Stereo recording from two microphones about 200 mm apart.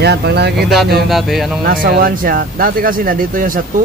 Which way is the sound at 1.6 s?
45° right (ahead or behind).